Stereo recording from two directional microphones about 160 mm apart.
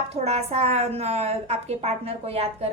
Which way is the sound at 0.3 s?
40° right (ahead or behind).